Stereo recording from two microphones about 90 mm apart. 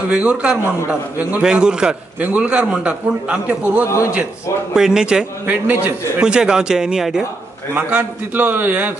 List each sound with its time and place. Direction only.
0.1 s a man's voice: 15° right (ahead or behind)
5.5 s a man's voice: 20° right (ahead or behind)
6.2 s a man's voice: 10° right (ahead or behind)